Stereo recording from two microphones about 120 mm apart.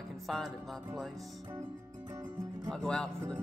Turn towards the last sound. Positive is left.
turn(degrees=5)  # may be behind; listen again after turning